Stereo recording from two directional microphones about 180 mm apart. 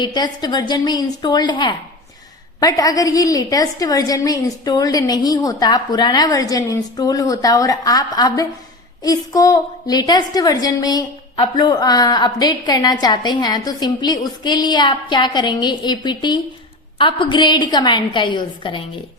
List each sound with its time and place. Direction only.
0.0 s a woman's voice: 25° left (ahead or behind)